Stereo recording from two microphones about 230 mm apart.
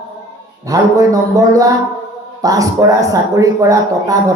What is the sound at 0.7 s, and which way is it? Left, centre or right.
A man's voice, centre.